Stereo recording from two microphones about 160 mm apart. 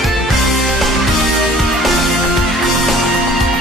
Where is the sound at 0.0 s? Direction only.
Centre (ahead or behind).